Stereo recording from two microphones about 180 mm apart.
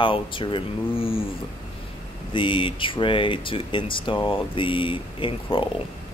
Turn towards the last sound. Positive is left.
turn(degrees=30)  # may be behind; listen again after turning